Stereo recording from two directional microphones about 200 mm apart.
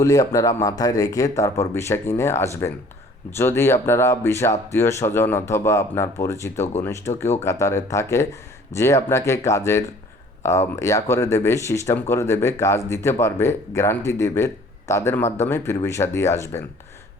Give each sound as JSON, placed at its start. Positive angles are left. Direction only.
{"t": 0.0, "sound": "speech", "side_deg": 15}